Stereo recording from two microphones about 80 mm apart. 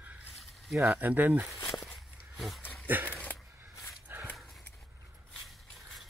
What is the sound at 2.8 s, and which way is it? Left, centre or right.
Dog, right.